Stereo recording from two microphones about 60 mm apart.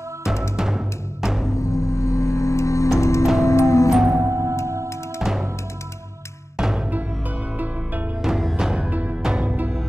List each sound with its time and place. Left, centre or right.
0.2 s music: centre
1.5 s music: left
3.9 s music: centre
4.2 s music: right
5.2 s music: centre
6.5 s music: centre
7.5 s music: right
8.2 s music: centre
8.8 s music: right
9.1 s music: centre